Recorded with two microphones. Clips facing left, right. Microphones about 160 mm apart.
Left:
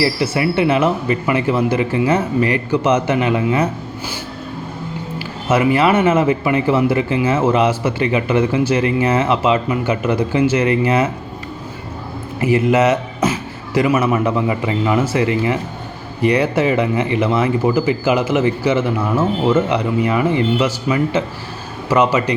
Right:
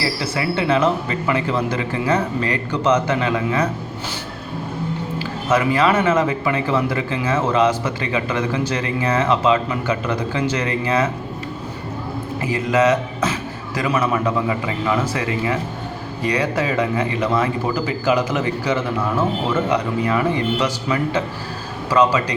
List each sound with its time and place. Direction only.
0.0 s speech: 20° left (ahead or behind)
5.5 s speech: 25° left (ahead or behind)
7.4 s speech: 10° left (ahead or behind)
8.1 s speech: 20° left (ahead or behind)
12.5 s a sound: 25° left (ahead or behind)
13.8 s speech: 25° left (ahead or behind)